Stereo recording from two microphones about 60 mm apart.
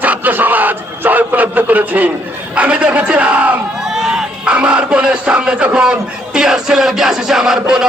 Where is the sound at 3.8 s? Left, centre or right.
Centre.